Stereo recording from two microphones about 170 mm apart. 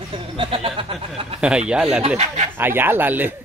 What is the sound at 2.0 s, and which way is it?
Speech, 40° right (ahead or behind).